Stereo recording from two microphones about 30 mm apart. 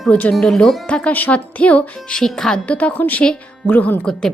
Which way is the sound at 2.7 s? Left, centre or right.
Left.